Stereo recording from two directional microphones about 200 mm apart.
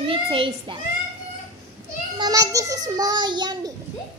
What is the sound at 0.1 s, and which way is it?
Speech, 25° right (ahead or behind).